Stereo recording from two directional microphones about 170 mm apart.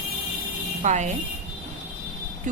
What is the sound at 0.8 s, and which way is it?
Speech, 45° right (ahead or behind).